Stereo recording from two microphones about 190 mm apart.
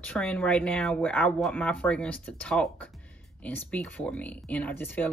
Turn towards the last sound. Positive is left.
turn(degrees=10)  # may be behind; listen again after turning